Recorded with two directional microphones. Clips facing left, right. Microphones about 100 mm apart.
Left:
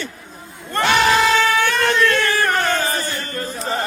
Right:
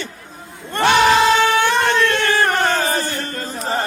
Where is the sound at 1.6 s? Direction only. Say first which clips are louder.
Right 1 dB; 25° right (ahead or behind).